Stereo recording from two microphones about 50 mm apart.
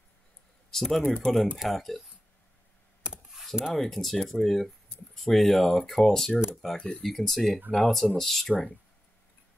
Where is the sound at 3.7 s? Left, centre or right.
Centre.